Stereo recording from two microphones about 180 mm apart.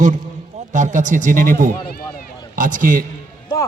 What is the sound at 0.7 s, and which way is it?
A man's voice, 45° right (ahead or behind).